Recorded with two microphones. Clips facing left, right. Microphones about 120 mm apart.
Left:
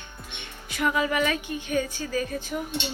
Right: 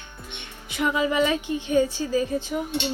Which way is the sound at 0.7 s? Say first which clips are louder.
Right 2 dB; 20° right (ahead or behind).